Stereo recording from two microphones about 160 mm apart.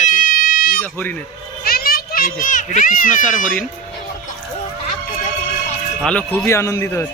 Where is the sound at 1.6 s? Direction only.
70° left (ahead or behind).